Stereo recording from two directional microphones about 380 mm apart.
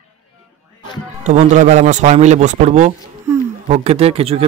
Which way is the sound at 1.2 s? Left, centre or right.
Centre.